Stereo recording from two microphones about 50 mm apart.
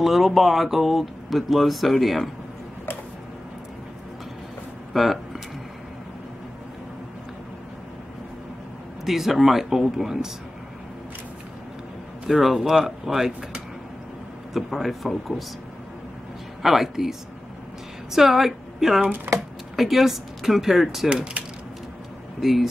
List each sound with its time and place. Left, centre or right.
0.0 s speech: centre
4.9 s a sound: centre
9.0 s speech: centre
12.3 s speech: centre
16.6 s speech: centre
18.1 s a woman's voice: centre
21.1 s speech: right
22.4 s speech: centre